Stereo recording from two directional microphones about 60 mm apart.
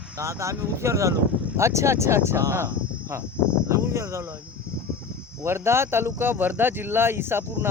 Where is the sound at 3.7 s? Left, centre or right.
Right.